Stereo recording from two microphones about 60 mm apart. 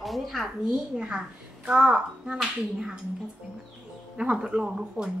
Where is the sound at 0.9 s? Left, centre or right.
Centre.